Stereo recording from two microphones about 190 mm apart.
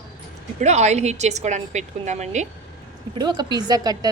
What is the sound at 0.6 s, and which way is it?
A woman's voice, 35° right (ahead or behind).